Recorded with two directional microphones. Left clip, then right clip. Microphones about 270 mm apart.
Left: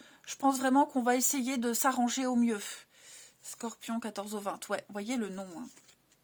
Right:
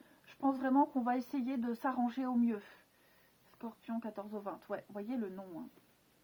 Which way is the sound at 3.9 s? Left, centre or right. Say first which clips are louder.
Left 4 dB; left.